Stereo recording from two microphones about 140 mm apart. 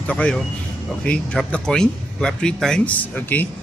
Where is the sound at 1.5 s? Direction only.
5° left (ahead or behind).